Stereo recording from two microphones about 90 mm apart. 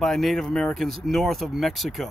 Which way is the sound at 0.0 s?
5° left (ahead or behind).